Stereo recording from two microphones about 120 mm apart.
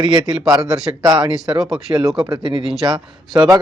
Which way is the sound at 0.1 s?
30° right (ahead or behind).